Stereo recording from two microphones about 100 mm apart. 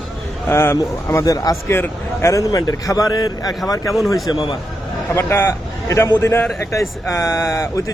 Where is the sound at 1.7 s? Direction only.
25° left (ahead or behind).